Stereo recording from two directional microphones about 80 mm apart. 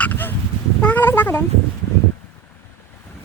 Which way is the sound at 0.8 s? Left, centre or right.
Centre.